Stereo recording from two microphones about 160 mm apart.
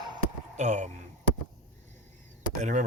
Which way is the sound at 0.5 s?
50° right (ahead or behind).